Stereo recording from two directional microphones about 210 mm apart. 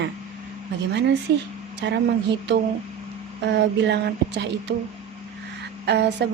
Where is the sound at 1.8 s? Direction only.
55° right (ahead or behind).